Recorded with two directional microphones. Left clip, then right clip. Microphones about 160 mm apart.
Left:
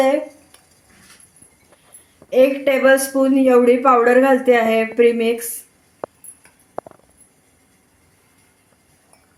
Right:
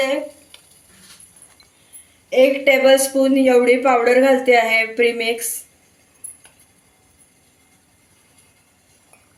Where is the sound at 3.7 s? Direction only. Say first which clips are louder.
Left 1 dB; 10° left (ahead or behind).